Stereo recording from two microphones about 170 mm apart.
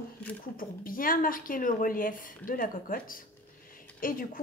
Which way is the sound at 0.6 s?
55° left (ahead or behind).